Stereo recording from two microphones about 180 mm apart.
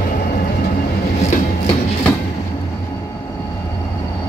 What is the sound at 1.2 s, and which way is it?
Train, 35° left (ahead or behind).